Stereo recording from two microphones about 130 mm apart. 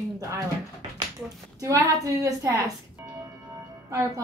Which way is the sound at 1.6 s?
25° right (ahead or behind).